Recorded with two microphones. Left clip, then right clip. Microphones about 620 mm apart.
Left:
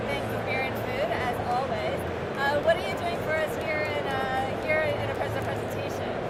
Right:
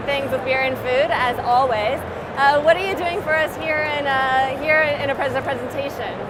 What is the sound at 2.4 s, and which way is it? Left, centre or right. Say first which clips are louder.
Music: right 10 dB; right.